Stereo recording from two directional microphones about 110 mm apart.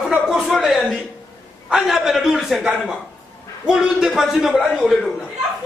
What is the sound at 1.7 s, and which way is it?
A man's voice, 5° right (ahead or behind).